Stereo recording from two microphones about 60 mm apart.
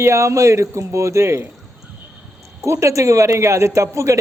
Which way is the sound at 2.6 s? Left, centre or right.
Right.